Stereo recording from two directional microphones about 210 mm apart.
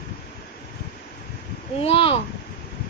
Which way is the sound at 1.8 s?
25° left (ahead or behind).